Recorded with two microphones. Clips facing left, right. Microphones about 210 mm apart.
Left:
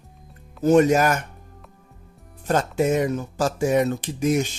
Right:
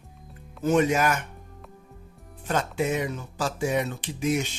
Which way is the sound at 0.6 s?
40° left (ahead or behind).